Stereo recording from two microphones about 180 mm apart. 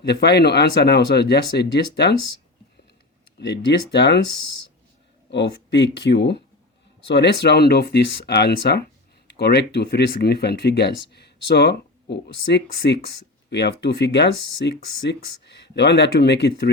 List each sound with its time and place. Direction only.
0.0 s speech: 65° left (ahead or behind)
3.3 s speech: 70° left (ahead or behind)
5.3 s speech: 75° left (ahead or behind)